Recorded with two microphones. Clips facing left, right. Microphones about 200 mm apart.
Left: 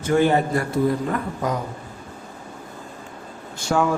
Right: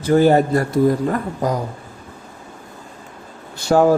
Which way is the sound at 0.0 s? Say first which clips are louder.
Right 5 dB; 35° right (ahead or behind).